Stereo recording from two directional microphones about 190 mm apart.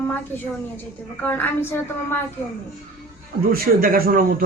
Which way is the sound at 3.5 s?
50° right (ahead or behind).